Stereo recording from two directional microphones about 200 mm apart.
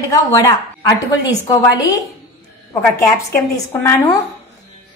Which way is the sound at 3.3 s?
15° left (ahead or behind).